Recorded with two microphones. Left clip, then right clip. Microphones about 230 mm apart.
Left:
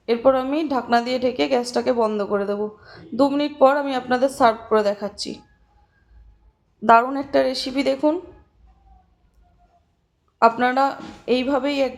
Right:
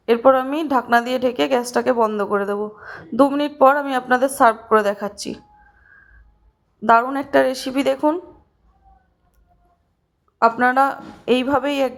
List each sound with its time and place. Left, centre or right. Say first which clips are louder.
0.0 s a woman's voice: right 3 dB; centre
6.8 s a woman's voice: even; centre
7.2 s a woman's voice: right 3 dB; centre
10.6 s a woman's voice: right 3 dB; centre